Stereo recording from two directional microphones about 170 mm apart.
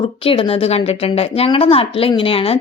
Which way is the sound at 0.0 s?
35° left (ahead or behind).